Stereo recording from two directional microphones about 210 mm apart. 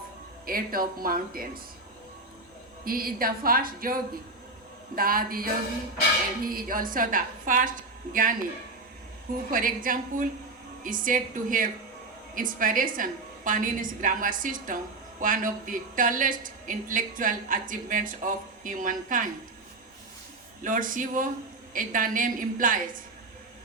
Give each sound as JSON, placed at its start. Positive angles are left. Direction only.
{"t": 0.4, "sound": "speech", "side_deg": -45}
{"t": 2.8, "sound": "speech", "side_deg": -45}
{"t": 6.5, "sound": "a woman's voice", "side_deg": -45}
{"t": 9.5, "sound": "a woman's voice", "side_deg": -40}
{"t": 20.7, "sound": "a woman's voice", "side_deg": -40}